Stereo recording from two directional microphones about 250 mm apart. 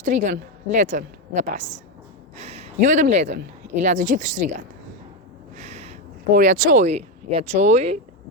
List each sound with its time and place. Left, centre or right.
0.0 s a woman's voice: right
5.5 s a sound: right
7.7 s a woman's voice: right